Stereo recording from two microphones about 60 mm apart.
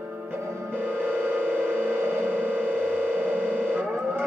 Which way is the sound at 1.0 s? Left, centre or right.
Right.